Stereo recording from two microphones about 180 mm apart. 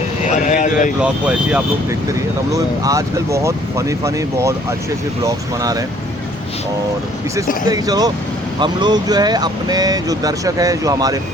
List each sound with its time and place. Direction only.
0.3 s vehicle: 45° left (ahead or behind)
1.0 s speech: 5° right (ahead or behind)
2.5 s speech: 20° right (ahead or behind)
7.7 s speech: 20° right (ahead or behind)